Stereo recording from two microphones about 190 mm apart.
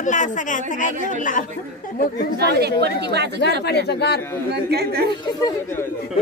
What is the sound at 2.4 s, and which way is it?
Speech, 60° right (ahead or behind).